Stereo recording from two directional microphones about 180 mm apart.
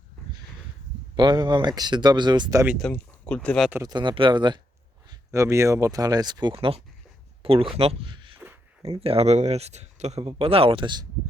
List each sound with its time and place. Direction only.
1.1 s speech: 25° right (ahead or behind)
2.6 s speech: centre (ahead or behind)
3.7 s speech: 15° right (ahead or behind)
3.9 s speech: 25° right (ahead or behind)